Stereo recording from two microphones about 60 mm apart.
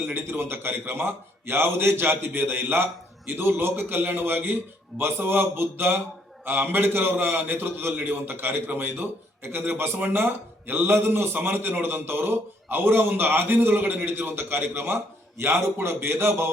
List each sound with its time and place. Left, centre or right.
0.0 s a man's voice: right